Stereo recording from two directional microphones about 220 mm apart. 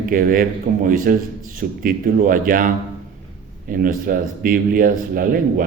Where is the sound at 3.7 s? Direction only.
40° right (ahead or behind).